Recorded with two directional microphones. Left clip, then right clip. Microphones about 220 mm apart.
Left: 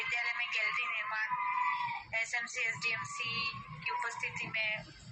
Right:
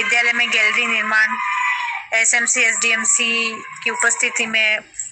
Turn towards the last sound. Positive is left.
turn(degrees=-60)  # may be behind; listen again after turning